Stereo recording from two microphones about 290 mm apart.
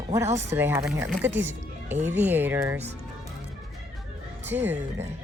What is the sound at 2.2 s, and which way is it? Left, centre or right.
Speech, centre.